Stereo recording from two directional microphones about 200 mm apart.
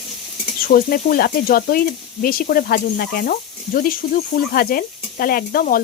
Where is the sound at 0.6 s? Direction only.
45° left (ahead or behind).